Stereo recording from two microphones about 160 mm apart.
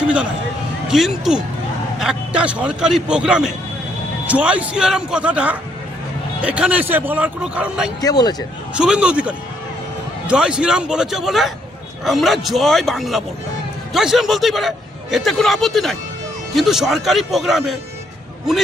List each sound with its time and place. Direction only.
0.9 s a man's voice: centre (ahead or behind)
8.0 s speech: 25° left (ahead or behind)
8.8 s a man's voice: 5° right (ahead or behind)